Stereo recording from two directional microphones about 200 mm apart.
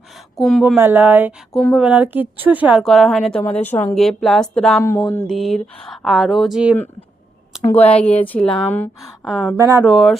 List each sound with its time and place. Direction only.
0.3 s speech: centre (ahead or behind)
0.8 s speech: 10° right (ahead or behind)
4.8 s speech: 15° left (ahead or behind)
5.2 s speech: centre (ahead or behind)
7.5 s a sound: centre (ahead or behind)
8.3 s speech: 5° left (ahead or behind)
9.2 s speech: 5° right (ahead or behind)
9.6 s speech: 15° right (ahead or behind)
9.9 s speech: centre (ahead or behind)